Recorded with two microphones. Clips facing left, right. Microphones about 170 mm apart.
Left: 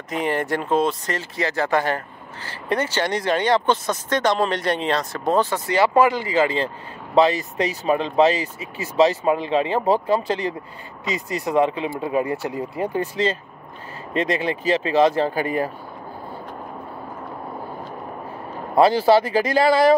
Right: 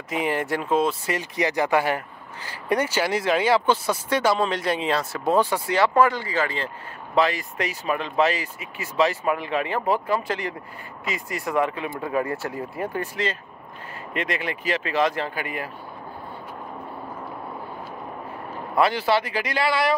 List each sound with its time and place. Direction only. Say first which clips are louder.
0.1 s speech: left 2 dB; 5° right (ahead or behind)
5.8 s speech: left 3 dB; 10° left (ahead or behind); by 15.7 s 35° left (ahead or behind)
18.8 s speech: left 6 dB; 35° left (ahead or behind)